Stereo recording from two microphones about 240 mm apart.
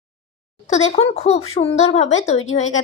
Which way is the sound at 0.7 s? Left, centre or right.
Left.